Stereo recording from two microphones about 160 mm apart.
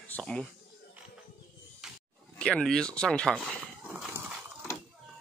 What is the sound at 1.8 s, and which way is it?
Wild animals, 5° right (ahead or behind).